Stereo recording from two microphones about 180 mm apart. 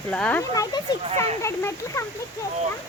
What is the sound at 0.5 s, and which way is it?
Speech, 20° left (ahead or behind).